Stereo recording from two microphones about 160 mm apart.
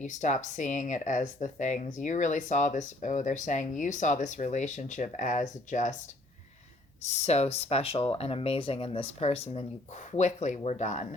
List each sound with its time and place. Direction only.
0.0 s speech: 50° left (ahead or behind)
7.0 s speech: 45° left (ahead or behind)